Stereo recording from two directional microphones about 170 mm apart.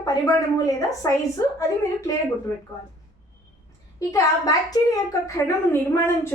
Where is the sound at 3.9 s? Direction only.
20° left (ahead or behind).